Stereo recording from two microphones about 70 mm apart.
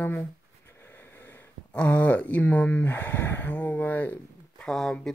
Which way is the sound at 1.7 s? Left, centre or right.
Centre.